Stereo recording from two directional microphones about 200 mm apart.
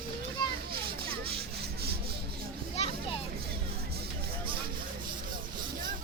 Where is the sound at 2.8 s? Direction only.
30° left (ahead or behind).